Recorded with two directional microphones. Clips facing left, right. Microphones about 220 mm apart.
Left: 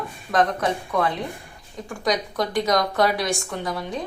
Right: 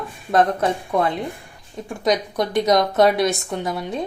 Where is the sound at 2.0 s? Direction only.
20° right (ahead or behind).